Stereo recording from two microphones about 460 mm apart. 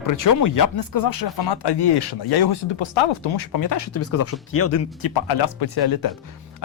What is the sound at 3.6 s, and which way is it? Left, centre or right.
Speech, left.